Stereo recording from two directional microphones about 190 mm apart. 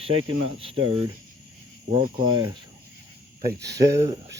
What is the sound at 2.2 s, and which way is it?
Cricket, 20° right (ahead or behind).